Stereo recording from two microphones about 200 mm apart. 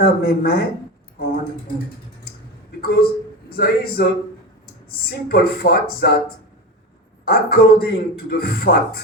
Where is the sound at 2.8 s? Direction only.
50° left (ahead or behind).